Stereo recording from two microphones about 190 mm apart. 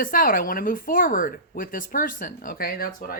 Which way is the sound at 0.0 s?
45° left (ahead or behind).